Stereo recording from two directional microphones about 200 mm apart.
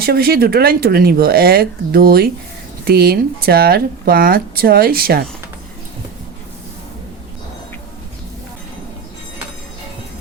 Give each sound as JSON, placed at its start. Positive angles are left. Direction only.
{"t": 0.0, "sound": "speech", "side_deg": -50}